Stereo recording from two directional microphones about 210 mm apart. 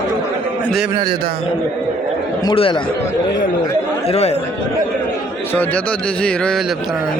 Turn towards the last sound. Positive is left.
turn(degrees=5)  # may be behind; listen again after turning